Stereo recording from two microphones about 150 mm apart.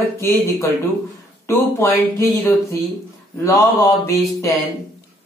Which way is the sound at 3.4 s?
20° left (ahead or behind).